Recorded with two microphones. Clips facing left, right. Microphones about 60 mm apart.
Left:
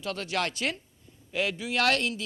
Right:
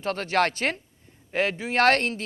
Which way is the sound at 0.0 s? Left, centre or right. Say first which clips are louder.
Right 7 dB; right.